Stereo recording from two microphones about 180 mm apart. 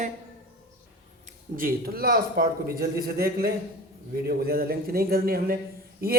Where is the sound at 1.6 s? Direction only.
55° right (ahead or behind).